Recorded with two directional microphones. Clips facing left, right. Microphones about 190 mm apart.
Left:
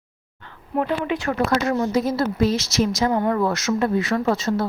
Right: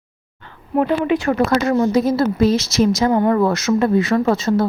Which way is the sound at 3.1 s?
55° right (ahead or behind).